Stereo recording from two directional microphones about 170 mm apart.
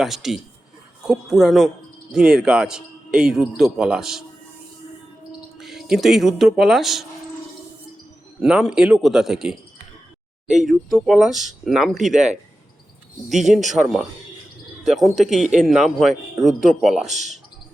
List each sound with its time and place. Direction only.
0.0 s speech: centre (ahead or behind)
5.5 s speech: centre (ahead or behind)
8.4 s speech: 5° right (ahead or behind)
10.6 s speech: centre (ahead or behind)
13.2 s speech: centre (ahead or behind)
14.8 s speech: centre (ahead or behind)
17.1 s speech: 45° right (ahead or behind)